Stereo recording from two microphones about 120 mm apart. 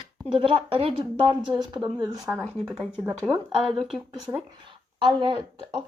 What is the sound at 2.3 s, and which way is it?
Speech, 20° right (ahead or behind).